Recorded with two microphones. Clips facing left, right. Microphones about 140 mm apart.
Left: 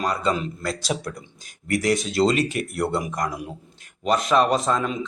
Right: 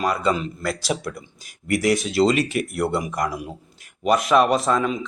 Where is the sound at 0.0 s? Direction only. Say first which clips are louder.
Right 2 dB; 10° right (ahead or behind).